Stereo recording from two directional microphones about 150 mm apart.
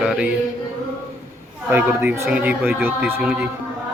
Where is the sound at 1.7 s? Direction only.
15° right (ahead or behind).